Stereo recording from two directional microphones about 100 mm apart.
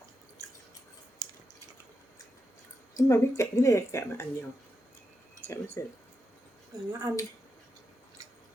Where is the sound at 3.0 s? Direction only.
30° left (ahead or behind).